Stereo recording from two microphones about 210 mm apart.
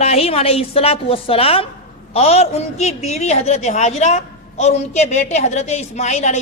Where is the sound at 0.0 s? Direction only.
30° left (ahead or behind).